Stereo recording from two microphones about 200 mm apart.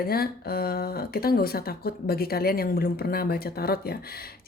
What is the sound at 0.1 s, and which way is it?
Speech, 50° left (ahead or behind).